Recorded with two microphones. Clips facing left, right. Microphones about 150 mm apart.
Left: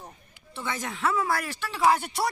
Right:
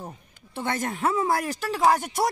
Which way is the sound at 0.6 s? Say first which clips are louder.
Right 4 dB; 50° right (ahead or behind).